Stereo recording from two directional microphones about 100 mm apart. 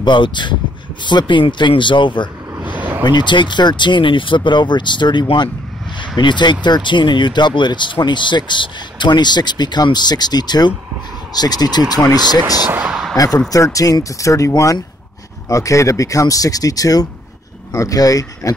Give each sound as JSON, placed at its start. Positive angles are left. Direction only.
{"t": 0.0, "sound": "speech", "side_deg": 50}
{"t": 2.6, "sound": "a sound", "side_deg": -15}
{"t": 3.0, "sound": "speech", "side_deg": 45}
{"t": 12.6, "sound": "speech", "side_deg": -20}
{"t": 13.1, "sound": "speech", "side_deg": 35}